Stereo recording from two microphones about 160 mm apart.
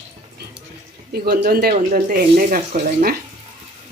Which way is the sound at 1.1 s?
75° right (ahead or behind).